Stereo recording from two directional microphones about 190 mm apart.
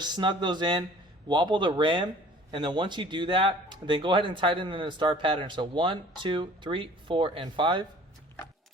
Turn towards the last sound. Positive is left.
turn(degrees=-25)  # may be behind; listen again after turning